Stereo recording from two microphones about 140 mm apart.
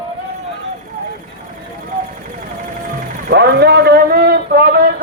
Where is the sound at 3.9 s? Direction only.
90° right.